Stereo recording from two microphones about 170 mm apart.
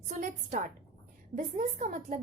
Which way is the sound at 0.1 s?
45° right (ahead or behind).